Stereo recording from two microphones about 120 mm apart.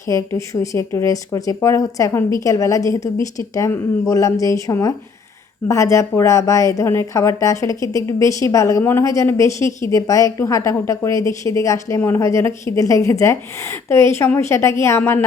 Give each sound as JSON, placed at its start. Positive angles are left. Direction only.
{"t": 0.1, "sound": "a woman's voice", "side_deg": 25}